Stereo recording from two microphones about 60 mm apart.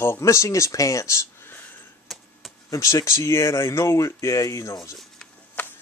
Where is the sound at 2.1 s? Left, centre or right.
Centre.